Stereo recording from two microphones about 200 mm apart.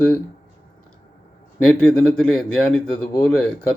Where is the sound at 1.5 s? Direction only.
5° left (ahead or behind).